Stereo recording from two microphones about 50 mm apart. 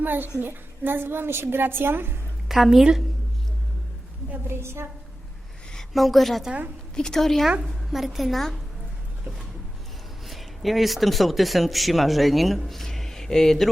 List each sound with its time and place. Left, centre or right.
0.0 s a child's voice: right
2.5 s a woman's voice: centre
4.4 s a woman's voice: right
5.9 s a woman's voice: centre
7.9 s a woman's voice: centre
10.2 s speech: centre